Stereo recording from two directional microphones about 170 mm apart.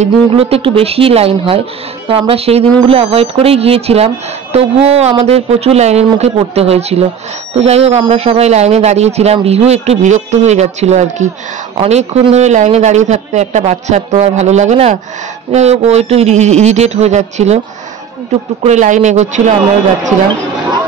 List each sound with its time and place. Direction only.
0.0 s speech: 35° right (ahead or behind)
18.6 s speech: 45° right (ahead or behind)